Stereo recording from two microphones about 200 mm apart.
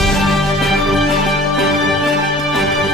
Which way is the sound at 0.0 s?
Centre (ahead or behind).